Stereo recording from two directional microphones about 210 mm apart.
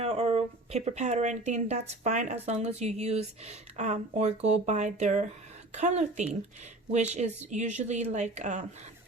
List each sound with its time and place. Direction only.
0.0 s speech: 30° right (ahead or behind)